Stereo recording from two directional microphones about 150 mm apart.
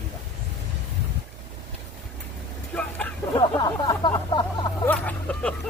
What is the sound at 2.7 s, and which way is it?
Speech, 5° left (ahead or behind).